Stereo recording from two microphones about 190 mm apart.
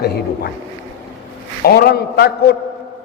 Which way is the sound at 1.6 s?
55° left (ahead or behind).